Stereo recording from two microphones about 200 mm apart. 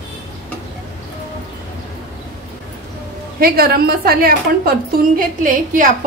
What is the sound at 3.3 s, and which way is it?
A woman's voice, 50° right (ahead or behind).